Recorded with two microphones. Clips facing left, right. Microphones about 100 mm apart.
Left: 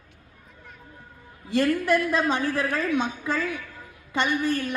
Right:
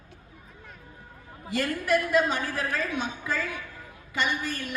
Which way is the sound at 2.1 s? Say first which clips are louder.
Left 1 dB; 25° left (ahead or behind).